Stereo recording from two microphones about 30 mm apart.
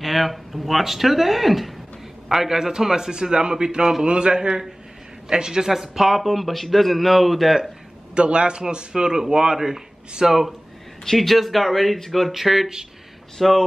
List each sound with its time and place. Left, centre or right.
0.0 s a man's voice: centre
3.1 s speech: right
4.0 s a man's voice: right
5.7 s a man's voice: centre
8.1 s a man's voice: right
10.2 s a man's voice: centre
12.4 s a man's voice: centre
13.4 s speech: centre